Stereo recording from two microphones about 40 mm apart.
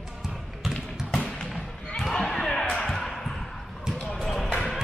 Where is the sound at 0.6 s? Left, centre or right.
Centre.